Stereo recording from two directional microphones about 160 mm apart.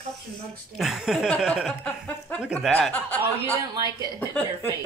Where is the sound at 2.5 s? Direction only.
5° left (ahead or behind).